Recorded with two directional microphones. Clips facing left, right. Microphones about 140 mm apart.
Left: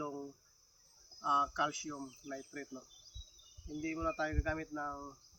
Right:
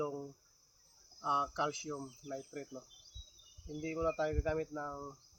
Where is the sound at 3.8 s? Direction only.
25° right (ahead or behind).